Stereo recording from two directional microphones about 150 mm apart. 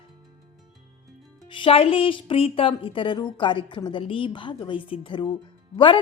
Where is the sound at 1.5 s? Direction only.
35° left (ahead or behind).